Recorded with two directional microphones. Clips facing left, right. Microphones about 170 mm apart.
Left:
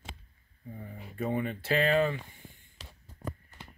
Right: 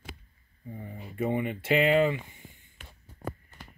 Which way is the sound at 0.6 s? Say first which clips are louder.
Right 3 dB; 10° right (ahead or behind).